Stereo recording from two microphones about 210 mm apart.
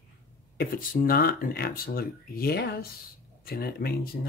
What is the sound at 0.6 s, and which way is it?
Speech, 45° left (ahead or behind).